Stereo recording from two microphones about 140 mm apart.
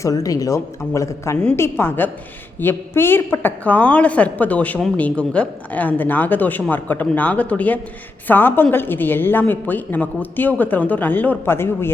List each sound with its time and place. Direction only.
0.0 s a woman's voice: 25° left (ahead or behind)